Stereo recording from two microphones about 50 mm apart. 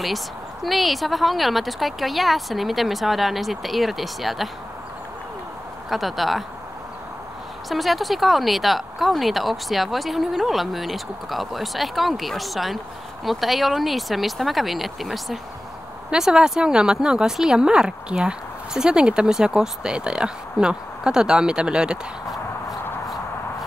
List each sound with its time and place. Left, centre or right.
0.7 s speech: centre
5.9 s speech: centre
7.7 s speech: centre
16.1 s speech: centre